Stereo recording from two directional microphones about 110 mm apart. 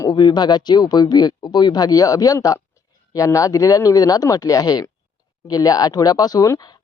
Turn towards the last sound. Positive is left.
turn(degrees=35)  # may be behind; listen again after turning